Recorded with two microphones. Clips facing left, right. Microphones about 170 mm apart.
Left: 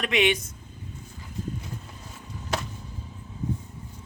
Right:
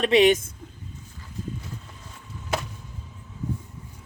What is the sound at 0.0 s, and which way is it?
Speech, 35° right (ahead or behind).